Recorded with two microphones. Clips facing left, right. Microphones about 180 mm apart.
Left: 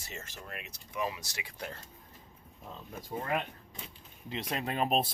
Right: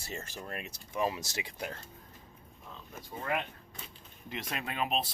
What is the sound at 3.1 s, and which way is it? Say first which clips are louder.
Speech: left 4 dB; 35° left (ahead or behind).